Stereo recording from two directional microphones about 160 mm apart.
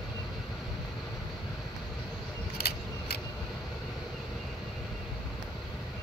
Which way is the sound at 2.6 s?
80° left.